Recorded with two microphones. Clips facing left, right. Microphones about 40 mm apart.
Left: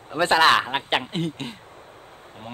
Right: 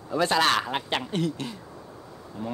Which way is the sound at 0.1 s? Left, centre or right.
Left.